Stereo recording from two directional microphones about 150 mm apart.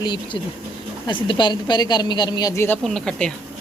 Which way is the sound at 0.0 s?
30° left (ahead or behind).